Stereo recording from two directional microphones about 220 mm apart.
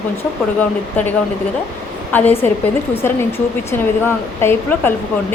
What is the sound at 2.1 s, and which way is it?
A woman's voice, 10° left (ahead or behind).